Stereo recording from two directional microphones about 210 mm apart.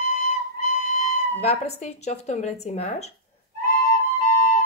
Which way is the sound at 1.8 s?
30° left (ahead or behind).